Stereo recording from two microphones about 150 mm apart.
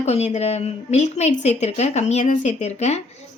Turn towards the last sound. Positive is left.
turn(degrees=45)  # may be behind; listen again after turning